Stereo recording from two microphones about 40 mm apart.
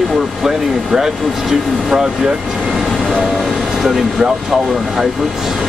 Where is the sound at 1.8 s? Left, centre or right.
Centre.